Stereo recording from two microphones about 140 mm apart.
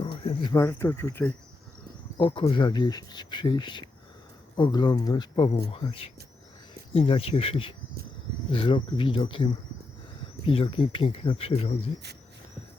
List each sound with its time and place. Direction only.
0.0 s a sound: 40° left (ahead or behind)
0.5 s speech: 20° left (ahead or behind)
2.1 s speech: 35° left (ahead or behind)